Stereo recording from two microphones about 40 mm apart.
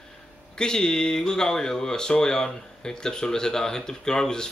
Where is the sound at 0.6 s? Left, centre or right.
Centre.